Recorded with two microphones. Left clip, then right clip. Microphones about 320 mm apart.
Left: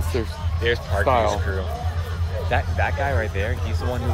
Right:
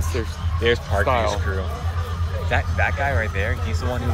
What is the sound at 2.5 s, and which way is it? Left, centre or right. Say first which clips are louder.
Speech: right 1 dB; centre.